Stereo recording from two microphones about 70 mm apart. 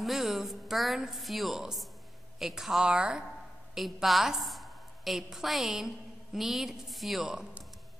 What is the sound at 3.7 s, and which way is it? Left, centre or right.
A woman's voice, centre.